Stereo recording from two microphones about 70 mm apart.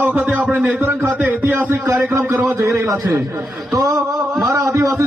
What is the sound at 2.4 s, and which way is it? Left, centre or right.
Speech, right.